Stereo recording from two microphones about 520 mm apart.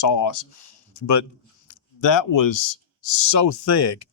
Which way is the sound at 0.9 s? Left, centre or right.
Left.